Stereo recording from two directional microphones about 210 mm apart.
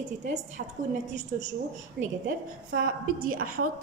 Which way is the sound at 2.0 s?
65° right (ahead or behind).